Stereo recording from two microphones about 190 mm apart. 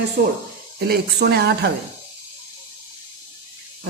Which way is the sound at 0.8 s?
55° right (ahead or behind).